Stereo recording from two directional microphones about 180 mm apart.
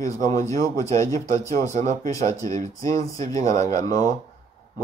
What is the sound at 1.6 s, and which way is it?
Speech, 40° right (ahead or behind).